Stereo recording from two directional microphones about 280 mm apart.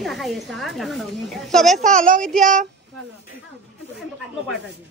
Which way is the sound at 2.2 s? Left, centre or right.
Centre.